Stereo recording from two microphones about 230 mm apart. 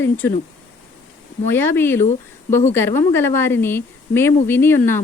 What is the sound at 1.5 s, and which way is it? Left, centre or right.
Speech, centre.